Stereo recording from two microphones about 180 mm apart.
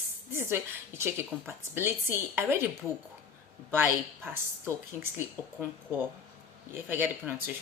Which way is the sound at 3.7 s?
10° right (ahead or behind).